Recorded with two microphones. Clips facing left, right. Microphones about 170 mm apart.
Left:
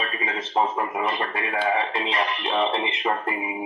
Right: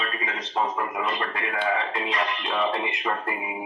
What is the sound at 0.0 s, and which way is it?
A man's voice, 25° left (ahead or behind).